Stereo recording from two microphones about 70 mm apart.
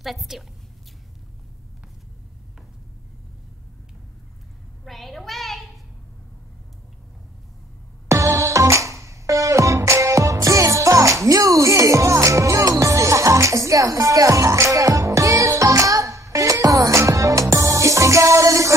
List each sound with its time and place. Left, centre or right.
0.0 s a woman's voice: centre
4.8 s a sound: centre
8.1 s music: right